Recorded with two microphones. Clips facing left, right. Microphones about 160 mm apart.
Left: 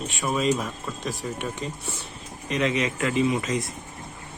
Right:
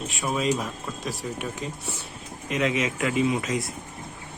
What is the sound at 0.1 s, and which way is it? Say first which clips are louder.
Speech: left 2 dB; centre (ahead or behind).